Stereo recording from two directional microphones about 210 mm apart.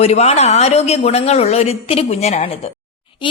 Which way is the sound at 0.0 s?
30° left (ahead or behind).